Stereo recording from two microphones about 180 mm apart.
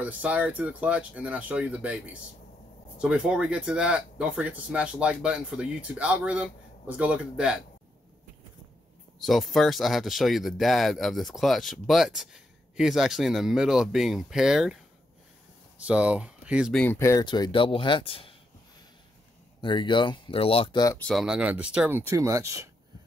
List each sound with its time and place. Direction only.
0.0 s speech: 10° right (ahead or behind)
3.0 s speech: 5° right (ahead or behind)
9.2 s speech: centre (ahead or behind)
15.9 s speech: 5° right (ahead or behind)
16.8 s speech: 15° left (ahead or behind); by 18.3 s 30° left (ahead or behind)
19.6 s speech: 25° left (ahead or behind)
21.0 s speech: centre (ahead or behind); by 22.7 s 15° right (ahead or behind)